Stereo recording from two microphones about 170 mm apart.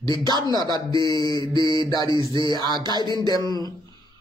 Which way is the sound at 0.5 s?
25° right (ahead or behind).